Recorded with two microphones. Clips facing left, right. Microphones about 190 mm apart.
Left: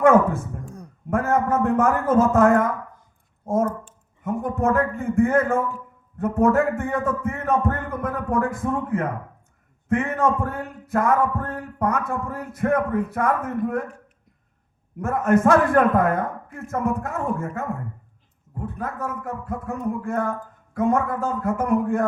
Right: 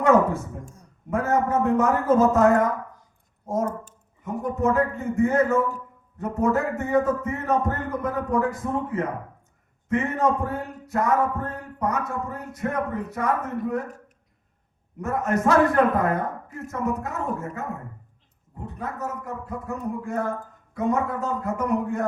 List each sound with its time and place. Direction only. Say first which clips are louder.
0.0 s a man's voice: left 2 dB; 50° left (ahead or behind)
15.0 s a man's voice: left 5 dB; 50° left (ahead or behind)